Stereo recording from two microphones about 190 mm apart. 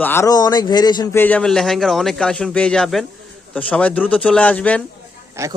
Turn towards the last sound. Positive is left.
turn(degrees=-15)  # may be behind; listen again after turning